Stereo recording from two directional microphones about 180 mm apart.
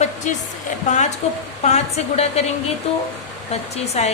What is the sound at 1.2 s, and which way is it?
A woman's voice, 35° left (ahead or behind).